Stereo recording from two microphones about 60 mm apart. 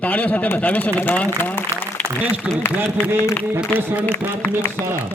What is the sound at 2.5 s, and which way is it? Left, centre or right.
Speech, centre.